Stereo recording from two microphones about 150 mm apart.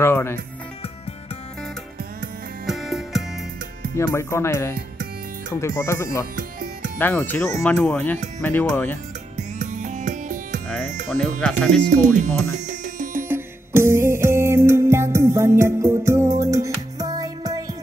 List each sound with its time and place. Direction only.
0.0 s speech: 15° left (ahead or behind)
2.6 s music: centre (ahead or behind)
3.9 s speech: 15° left (ahead or behind)
9.6 s music: 55° right (ahead or behind)
11.1 s speech: 5° left (ahead or behind)
12.5 s music: 60° right (ahead or behind)
13.3 s music: 15° right (ahead or behind)